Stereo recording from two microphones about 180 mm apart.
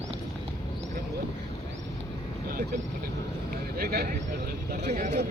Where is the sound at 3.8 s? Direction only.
60° right (ahead or behind).